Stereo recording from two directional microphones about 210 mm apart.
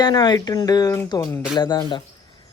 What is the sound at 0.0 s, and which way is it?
Speech, 20° left (ahead or behind).